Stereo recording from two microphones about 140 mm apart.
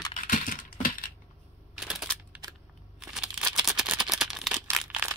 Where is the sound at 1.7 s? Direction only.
5° right (ahead or behind).